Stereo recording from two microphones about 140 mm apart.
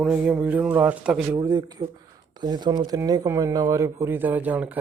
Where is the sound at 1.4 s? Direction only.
25° right (ahead or behind).